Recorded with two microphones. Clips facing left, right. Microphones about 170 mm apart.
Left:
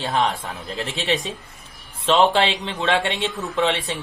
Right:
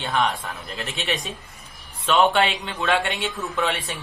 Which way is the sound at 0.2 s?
25° left (ahead or behind).